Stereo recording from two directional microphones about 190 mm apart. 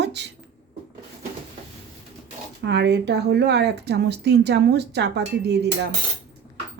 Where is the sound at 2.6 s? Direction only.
65° right (ahead or behind).